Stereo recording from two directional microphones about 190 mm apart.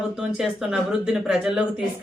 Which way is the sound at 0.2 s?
5° right (ahead or behind).